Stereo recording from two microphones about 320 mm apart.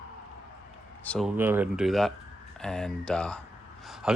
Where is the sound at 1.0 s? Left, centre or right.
Centre.